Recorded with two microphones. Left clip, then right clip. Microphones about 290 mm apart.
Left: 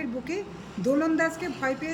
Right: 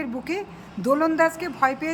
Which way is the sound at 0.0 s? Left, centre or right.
Centre.